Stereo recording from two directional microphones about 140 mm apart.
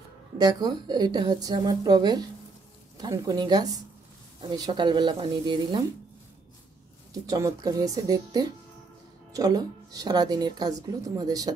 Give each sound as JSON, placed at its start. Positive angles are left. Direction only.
{"t": 0.4, "sound": "a woman's voice", "side_deg": -30}
{"t": 7.2, "sound": "a woman's voice", "side_deg": -25}